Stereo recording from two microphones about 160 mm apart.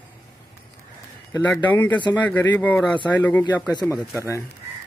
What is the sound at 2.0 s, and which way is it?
Speech, 30° left (ahead or behind).